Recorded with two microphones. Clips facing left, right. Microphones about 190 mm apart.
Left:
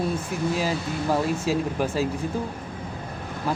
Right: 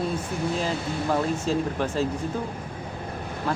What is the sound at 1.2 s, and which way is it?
Speech, 10° left (ahead or behind).